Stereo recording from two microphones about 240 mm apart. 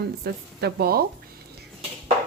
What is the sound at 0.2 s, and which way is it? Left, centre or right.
Speech, right.